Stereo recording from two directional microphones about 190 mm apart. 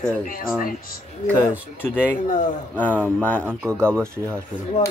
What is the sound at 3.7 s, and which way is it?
Speech, 5° left (ahead or behind).